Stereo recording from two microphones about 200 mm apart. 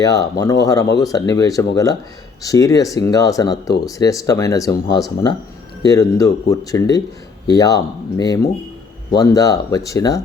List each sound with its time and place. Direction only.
0.0 s speech: 20° left (ahead or behind)